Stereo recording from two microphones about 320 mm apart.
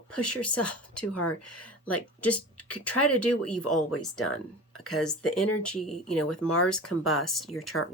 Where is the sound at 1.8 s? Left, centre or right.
Centre.